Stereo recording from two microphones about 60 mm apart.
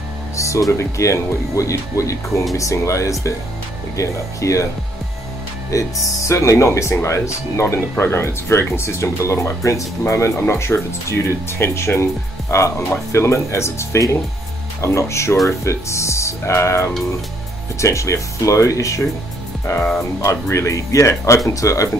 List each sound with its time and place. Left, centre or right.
0.4 s speech: left
5.7 s speech: left
10.4 s speech: left
20.0 s speech: left